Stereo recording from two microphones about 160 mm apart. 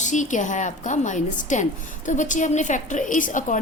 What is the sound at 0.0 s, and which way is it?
A woman's voice, 50° left (ahead or behind).